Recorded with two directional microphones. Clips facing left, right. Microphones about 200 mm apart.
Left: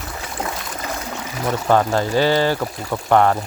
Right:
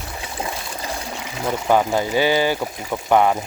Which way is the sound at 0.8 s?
30° right (ahead or behind).